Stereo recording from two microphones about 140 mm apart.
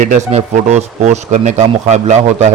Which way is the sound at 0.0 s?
60° right (ahead or behind).